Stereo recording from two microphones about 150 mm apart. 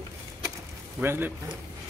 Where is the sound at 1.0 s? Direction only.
15° right (ahead or behind).